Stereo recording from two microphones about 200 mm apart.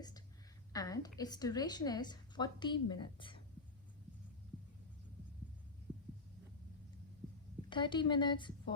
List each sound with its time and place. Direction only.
0.7 s a woman's voice: 20° left (ahead or behind)
7.7 s a woman's voice: 25° left (ahead or behind)